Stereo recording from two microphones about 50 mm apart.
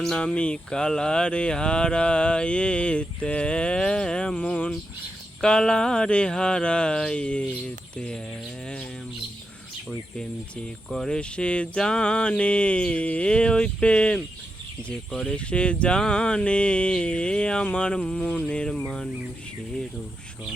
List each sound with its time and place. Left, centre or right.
0.2 s mantra: left
4.4 s mantra: left
5.4 s mantra: centre
7.9 s speech: centre
10.8 s speech: centre
11.2 s mantra: left
15.3 s mantra: left